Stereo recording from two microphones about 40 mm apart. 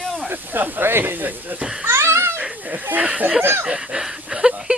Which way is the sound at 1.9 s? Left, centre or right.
Right.